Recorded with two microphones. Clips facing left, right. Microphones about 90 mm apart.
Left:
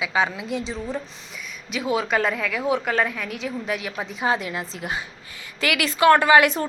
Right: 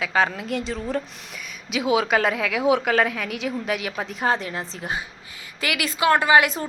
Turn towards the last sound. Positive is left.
turn(degrees=-25)  # may be behind; listen again after turning